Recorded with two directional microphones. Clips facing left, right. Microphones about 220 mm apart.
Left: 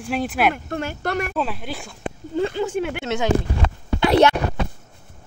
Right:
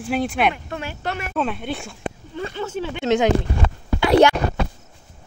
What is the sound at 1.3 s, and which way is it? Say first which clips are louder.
Speech: right 2 dB; centre (ahead or behind).